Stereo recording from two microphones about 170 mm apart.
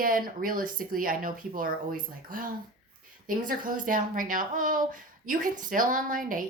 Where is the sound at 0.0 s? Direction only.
55° right (ahead or behind).